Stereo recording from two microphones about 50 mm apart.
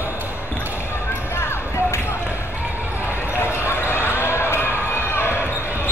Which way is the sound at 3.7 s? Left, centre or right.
Left.